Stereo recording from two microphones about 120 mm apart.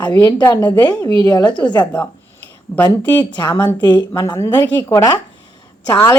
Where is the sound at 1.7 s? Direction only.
10° left (ahead or behind).